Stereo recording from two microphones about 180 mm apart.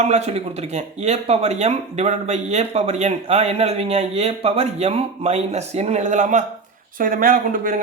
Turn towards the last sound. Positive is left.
turn(degrees=-50)  # may be behind; listen again after turning